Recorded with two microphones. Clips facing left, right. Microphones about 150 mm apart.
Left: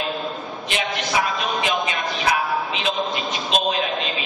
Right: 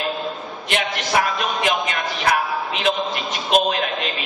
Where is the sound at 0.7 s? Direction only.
55° right (ahead or behind).